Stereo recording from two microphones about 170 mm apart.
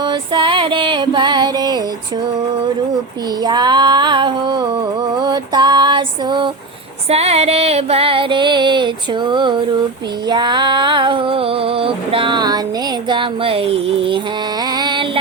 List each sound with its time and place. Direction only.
0.0 s female singing: 30° right (ahead or behind)
3.4 s female singing: 25° right (ahead or behind)
5.1 s music: 25° right (ahead or behind)
7.1 s female singing: 35° right (ahead or behind)
13.1 s speech: 30° right (ahead or behind)
14.7 s a sound: 25° right (ahead or behind)